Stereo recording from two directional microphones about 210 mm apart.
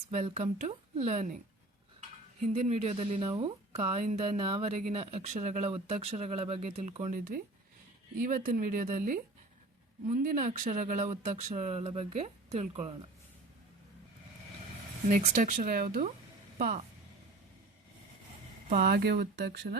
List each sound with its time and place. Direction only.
0.3 s a woman's voice: 30° right (ahead or behind)
2.5 s a woman's voice: 30° right (ahead or behind)
15.1 s a woman's voice: 35° right (ahead or behind)
18.7 s speech: 45° right (ahead or behind)